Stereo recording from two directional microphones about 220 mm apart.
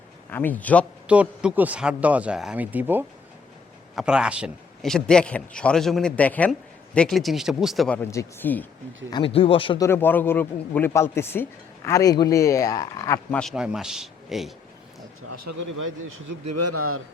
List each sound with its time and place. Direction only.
0.3 s speech: 10° left (ahead or behind)
1.0 s a man's voice: 5° right (ahead or behind)
9.0 s speech: 20° left (ahead or behind)
13.4 s a man's voice: centre (ahead or behind)
16.6 s a man's voice: 90° right